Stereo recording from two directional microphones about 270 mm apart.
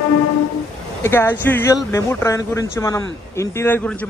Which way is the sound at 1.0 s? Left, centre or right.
Centre.